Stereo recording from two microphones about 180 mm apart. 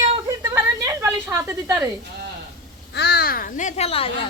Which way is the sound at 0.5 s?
15° right (ahead or behind).